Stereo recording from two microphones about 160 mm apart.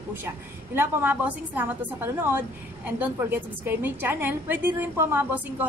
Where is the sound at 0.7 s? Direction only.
15° right (ahead or behind).